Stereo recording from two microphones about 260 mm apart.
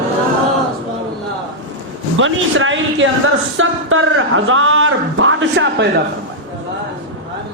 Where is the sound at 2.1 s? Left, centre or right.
Right.